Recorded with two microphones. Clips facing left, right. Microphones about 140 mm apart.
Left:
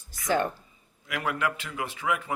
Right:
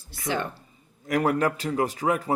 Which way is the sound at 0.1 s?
45° left (ahead or behind).